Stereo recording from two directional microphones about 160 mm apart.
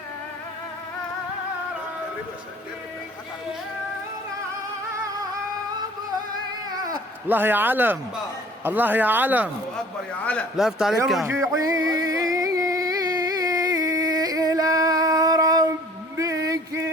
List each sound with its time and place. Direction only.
7.3 s speech: 10° right (ahead or behind)
10.2 s a man's voice: 5° left (ahead or behind)
11.3 s music: 20° right (ahead or behind)
16.1 s a sound: 20° right (ahead or behind)